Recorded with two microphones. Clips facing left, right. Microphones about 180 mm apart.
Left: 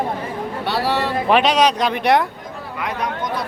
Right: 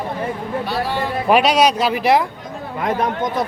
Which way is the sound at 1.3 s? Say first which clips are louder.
Right 2 dB; 10° right (ahead or behind).